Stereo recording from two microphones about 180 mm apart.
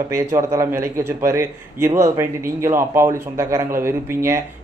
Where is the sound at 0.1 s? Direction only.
15° right (ahead or behind).